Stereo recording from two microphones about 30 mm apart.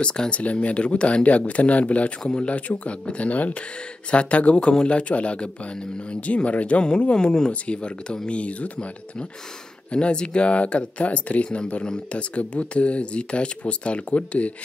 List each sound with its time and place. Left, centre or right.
0.0 s speech: left
0.3 s speech: left
2.2 s speech: left
2.5 s speech: left
4.1 s speech: left
7.2 s speech: left
7.6 s speech: left
9.8 s speech: left